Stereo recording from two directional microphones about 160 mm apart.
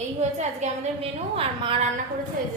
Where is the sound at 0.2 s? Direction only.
45° right (ahead or behind).